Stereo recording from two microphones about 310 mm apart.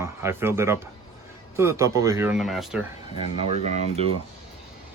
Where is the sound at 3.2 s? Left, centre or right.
Centre.